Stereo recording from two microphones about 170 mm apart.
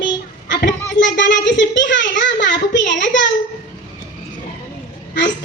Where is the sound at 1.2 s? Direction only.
90° left.